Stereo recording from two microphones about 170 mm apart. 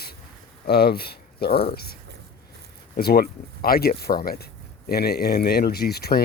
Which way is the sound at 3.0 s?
65° left (ahead or behind).